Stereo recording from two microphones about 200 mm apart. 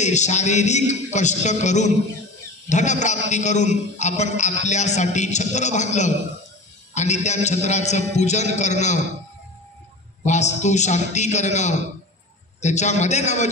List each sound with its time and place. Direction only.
0.0 s a man's voice: 35° left (ahead or behind)
10.2 s a man's voice: 35° left (ahead or behind)